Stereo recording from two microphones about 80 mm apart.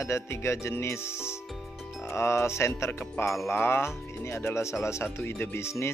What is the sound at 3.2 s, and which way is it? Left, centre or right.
Music, centre.